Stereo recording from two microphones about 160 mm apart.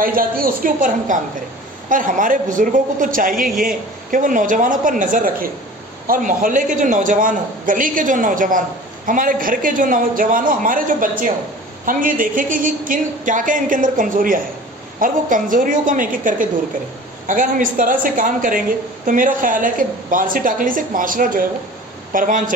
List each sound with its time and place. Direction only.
0.0 s a man's voice: 60° right (ahead or behind)